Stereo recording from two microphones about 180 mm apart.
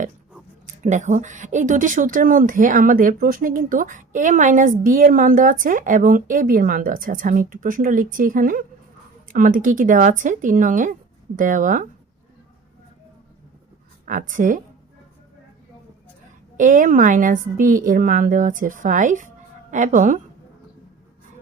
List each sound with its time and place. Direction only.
0.8 s speech: 40° right (ahead or behind)
14.0 s speech: 50° right (ahead or behind)
16.6 s speech: 45° right (ahead or behind)